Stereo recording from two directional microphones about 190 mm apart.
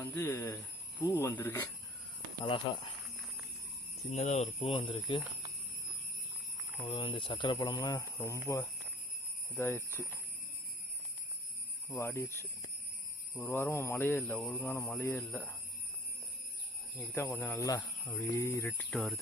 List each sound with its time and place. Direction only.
0.0 s speech: 10° left (ahead or behind)
2.4 s speech: 25° left (ahead or behind)
4.1 s speech: 35° left (ahead or behind)
6.7 s speech: 30° left (ahead or behind); by 10.1 s 15° left (ahead or behind)
11.9 s speech: 15° left (ahead or behind)
17.1 s speech: 10° left (ahead or behind)
18.9 s speech: centre (ahead or behind)